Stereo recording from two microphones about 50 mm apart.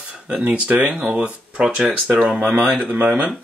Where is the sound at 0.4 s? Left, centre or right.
Right; by 2.2 s centre.